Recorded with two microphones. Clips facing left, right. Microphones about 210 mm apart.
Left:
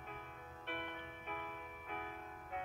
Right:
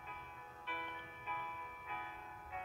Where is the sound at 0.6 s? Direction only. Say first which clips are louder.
Left 3 dB; 55° left (ahead or behind).